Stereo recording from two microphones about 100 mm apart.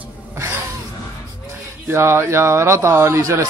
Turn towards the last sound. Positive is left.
turn(degrees=-25)  # may be behind; listen again after turning